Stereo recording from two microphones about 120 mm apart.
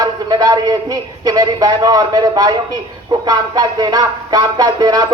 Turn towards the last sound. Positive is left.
turn(degrees=-35)  # may be behind; listen again after turning